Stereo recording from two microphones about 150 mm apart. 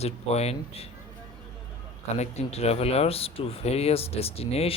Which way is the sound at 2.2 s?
45° left (ahead or behind).